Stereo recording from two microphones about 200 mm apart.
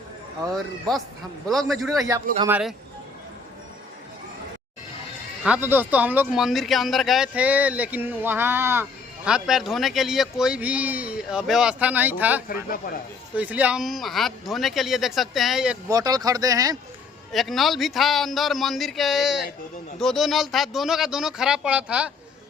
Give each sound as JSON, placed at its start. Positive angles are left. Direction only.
{"t": 0.5, "sound": "speech", "side_deg": 0}
{"t": 5.4, "sound": "a man's voice", "side_deg": -5}
{"t": 12.5, "sound": "speech", "side_deg": 45}
{"t": 13.3, "sound": "speech", "side_deg": -10}
{"t": 15.9, "sound": "a man's voice", "side_deg": -20}
{"t": 17.3, "sound": "speech", "side_deg": 0}